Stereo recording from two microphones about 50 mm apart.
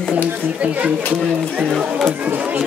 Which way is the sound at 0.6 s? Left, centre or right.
Right.